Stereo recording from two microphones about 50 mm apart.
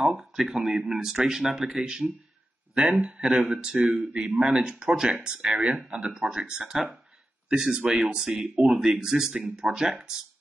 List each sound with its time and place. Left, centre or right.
0.2 s speech: centre
6.7 s speech: centre
7.4 s speech: centre